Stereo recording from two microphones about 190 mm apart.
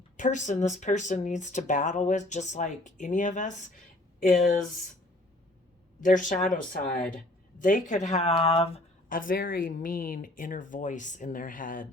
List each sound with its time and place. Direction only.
0.2 s speech: 40° left (ahead or behind)
6.0 s speech: 45° left (ahead or behind)
7.6 s speech: 45° left (ahead or behind)
9.0 s speech: 45° left (ahead or behind)